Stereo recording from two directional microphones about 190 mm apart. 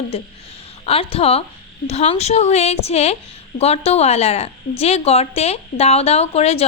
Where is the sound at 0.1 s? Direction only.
30° left (ahead or behind).